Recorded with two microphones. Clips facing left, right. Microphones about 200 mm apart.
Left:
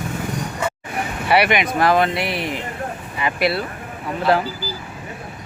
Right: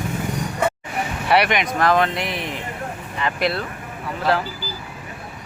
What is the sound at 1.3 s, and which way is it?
Speech, 5° left (ahead or behind).